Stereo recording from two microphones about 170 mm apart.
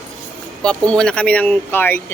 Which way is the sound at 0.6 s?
5° left (ahead or behind).